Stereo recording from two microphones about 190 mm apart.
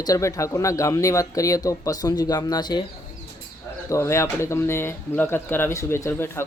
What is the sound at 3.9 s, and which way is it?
Speech, 15° left (ahead or behind).